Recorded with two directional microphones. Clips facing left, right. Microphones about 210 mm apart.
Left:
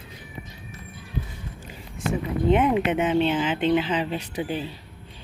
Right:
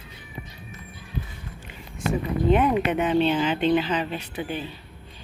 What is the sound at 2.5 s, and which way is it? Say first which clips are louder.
Speech: even; 20° left (ahead or behind).